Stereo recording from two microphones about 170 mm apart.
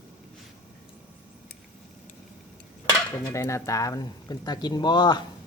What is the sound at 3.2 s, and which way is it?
Speech, 15° left (ahead or behind).